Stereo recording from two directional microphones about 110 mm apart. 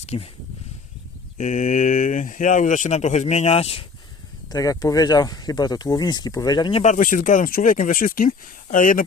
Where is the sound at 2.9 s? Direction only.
90° left; by 3.8 s 65° left (ahead or behind).